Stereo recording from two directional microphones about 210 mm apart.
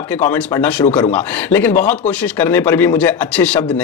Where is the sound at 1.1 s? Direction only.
10° left (ahead or behind).